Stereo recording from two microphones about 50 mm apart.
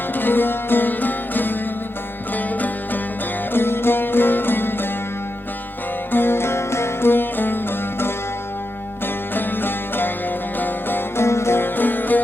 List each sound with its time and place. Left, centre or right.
0.2 s music: left
3.5 s music: left
6.1 s music: left
9.3 s music: left
11.2 s music: left